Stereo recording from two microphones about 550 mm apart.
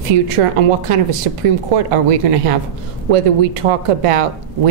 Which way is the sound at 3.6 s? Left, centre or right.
Right.